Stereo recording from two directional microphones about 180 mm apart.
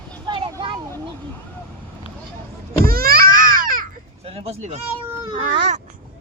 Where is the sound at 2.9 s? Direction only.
55° right (ahead or behind).